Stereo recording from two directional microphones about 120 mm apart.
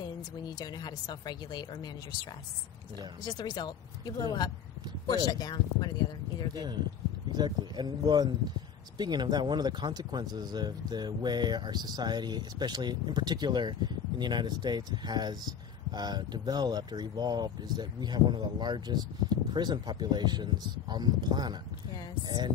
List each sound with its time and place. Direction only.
0.6 s a woman's voice: 35° left (ahead or behind)
3.3 s a woman's voice: 35° left (ahead or behind)
6.5 s speech: 35° right (ahead or behind)